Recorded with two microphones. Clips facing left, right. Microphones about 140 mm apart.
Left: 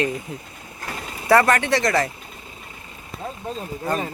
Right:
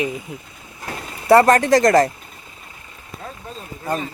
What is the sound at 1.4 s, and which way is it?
Speech, 35° right (ahead or behind).